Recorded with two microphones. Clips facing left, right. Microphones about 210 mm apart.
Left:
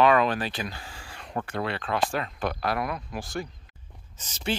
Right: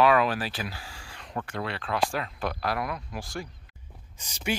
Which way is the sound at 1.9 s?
50° left (ahead or behind).